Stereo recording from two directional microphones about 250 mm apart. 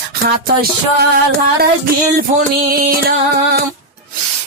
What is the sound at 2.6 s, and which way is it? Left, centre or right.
Music, right.